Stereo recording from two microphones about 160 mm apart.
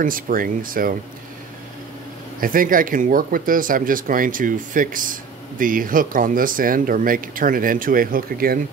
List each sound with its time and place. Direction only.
0.0 s speech: 60° right (ahead or behind)
2.4 s speech: 60° right (ahead or behind)